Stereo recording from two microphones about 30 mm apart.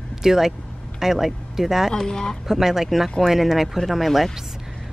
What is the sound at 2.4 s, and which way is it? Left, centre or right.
Speech, centre.